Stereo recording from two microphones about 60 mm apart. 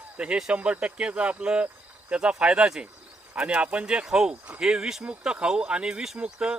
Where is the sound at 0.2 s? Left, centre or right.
Centre.